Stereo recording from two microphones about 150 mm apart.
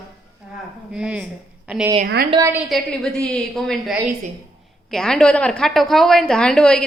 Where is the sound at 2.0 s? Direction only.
90° right.